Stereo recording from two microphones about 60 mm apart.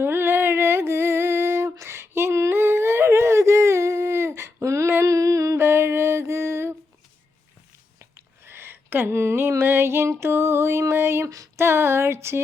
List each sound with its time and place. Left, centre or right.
0.0 s a sound: right
1.8 s female singing: right
2.4 s humming: right
5.0 s music: right
5.5 s music: right
8.4 s a sound: right